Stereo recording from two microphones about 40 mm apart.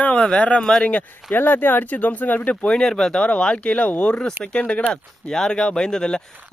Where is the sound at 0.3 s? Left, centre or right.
Left.